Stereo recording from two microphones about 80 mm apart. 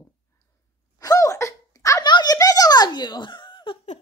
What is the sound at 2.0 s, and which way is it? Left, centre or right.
Giggle, left.